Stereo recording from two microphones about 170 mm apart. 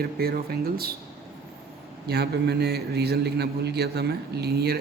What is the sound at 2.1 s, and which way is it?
A man's voice, 70° right (ahead or behind).